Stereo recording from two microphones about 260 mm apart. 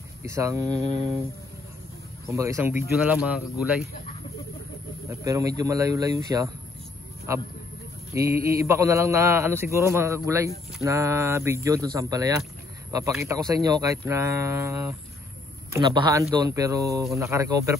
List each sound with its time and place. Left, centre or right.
0.2 s a man's voice: centre
2.2 s a man's voice: centre
5.2 s a man's voice: centre